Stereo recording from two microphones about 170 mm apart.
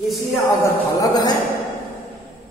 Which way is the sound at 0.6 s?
20° left (ahead or behind).